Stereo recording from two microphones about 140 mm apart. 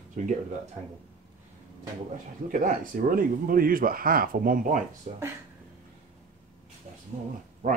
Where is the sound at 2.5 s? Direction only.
75° right (ahead or behind).